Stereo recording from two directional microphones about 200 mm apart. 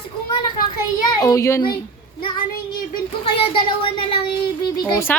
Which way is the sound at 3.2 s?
25° left (ahead or behind).